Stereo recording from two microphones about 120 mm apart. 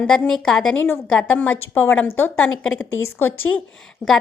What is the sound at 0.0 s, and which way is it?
A woman's voice, 5° left (ahead or behind).